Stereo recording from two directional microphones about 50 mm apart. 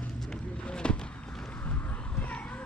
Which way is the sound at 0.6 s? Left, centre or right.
Centre.